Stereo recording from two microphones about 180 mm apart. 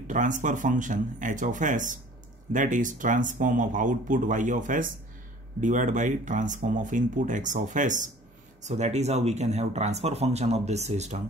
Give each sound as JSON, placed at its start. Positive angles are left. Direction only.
{"t": 0.1, "sound": "speech", "side_deg": -45}